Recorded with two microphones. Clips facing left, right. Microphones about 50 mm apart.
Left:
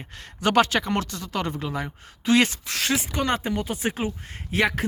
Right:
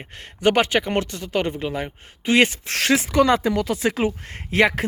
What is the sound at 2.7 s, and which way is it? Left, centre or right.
Speech, right.